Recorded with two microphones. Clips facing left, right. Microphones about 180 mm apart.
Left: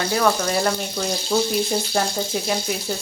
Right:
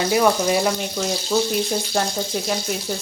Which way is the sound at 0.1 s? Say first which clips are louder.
Right 3 dB; 10° right (ahead or behind).